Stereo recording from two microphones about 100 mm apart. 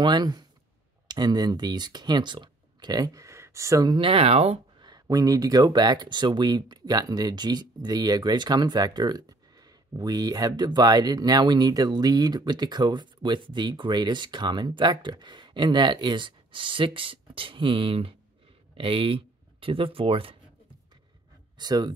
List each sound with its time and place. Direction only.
0.0 s speech: 45° right (ahead or behind)
3.9 s speech: 65° right (ahead or behind); by 4.6 s 90° right
4.7 s a sound: 45° right (ahead or behind)
5.0 s speech: 35° right (ahead or behind); by 20.3 s 65° right (ahead or behind)
21.5 s speech: 45° right (ahead or behind)